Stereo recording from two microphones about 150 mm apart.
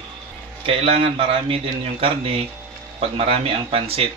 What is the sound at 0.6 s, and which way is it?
Speech, 40° right (ahead or behind).